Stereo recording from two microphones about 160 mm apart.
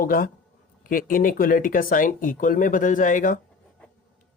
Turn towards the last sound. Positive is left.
turn(degrees=55)  # may be behind; listen again after turning